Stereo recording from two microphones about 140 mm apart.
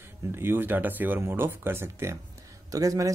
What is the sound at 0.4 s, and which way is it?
Speech, 15° right (ahead or behind).